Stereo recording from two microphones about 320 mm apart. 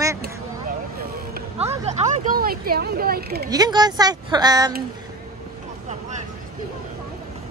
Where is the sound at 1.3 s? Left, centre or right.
Centre.